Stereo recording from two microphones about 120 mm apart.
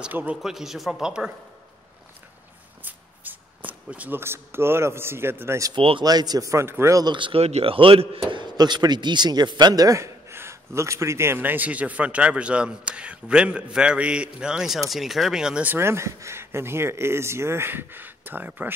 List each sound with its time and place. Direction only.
0.0 s speech: 15° right (ahead or behind)
2.8 s speech: 15° right (ahead or behind)
5.7 s speech: 45° right (ahead or behind)
6.0 s a man's voice: 35° right (ahead or behind)
7.2 s speech: 45° right (ahead or behind)
7.4 s speech: 55° right (ahead or behind)
8.3 s speech: 40° right (ahead or behind); by 18.7 s 15° right (ahead or behind)